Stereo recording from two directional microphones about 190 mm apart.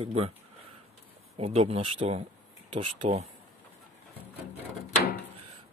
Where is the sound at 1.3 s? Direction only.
30° right (ahead or behind).